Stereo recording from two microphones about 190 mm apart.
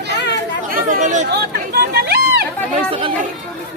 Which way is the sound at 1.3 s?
55° right (ahead or behind).